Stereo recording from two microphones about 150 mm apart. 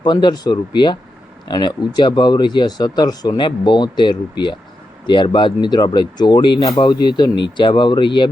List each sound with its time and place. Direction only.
0.0 s speech: 30° left (ahead or behind)